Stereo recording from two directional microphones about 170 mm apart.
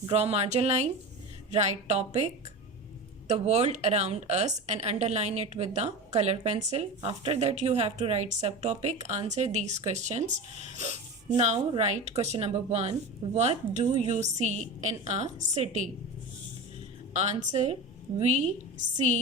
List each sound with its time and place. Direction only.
0.0 s a woman's voice: 40° right (ahead or behind)
17.2 s a woman's voice: 40° right (ahead or behind)